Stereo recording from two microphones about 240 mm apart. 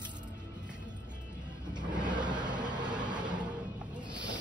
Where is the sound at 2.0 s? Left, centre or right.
Centre.